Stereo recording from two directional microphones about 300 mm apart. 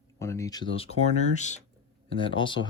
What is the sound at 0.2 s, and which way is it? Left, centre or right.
Speech, centre.